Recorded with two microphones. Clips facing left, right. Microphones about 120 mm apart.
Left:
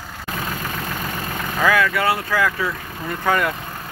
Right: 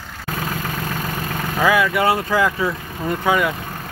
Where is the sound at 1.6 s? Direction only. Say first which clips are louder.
Right 2 dB; 15° right (ahead or behind).